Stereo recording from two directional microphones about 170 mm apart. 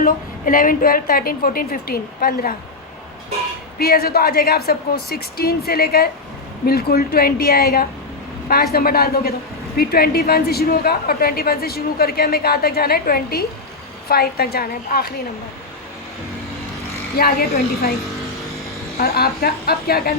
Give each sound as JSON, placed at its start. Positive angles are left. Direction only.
{"t": 0.0, "sound": "a woman's voice", "side_deg": 55}
{"t": 3.8, "sound": "a woman's voice", "side_deg": 65}
{"t": 17.2, "sound": "a woman's voice", "side_deg": 65}
{"t": 18.9, "sound": "a woman's voice", "side_deg": 65}